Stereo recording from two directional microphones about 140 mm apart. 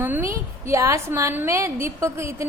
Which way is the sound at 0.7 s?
20° right (ahead or behind).